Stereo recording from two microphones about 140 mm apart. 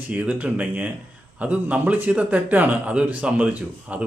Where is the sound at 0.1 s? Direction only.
10° right (ahead or behind).